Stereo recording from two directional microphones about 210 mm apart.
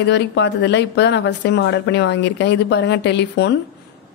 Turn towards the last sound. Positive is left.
turn(degrees=55)  # may be behind; listen again after turning